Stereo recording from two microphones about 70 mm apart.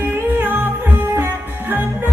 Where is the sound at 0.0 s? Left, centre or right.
Right.